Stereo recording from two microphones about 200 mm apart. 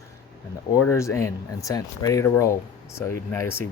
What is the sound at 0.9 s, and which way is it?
Speech, 15° left (ahead or behind).